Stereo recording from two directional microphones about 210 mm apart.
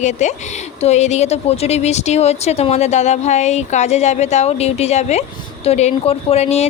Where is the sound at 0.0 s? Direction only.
35° left (ahead or behind).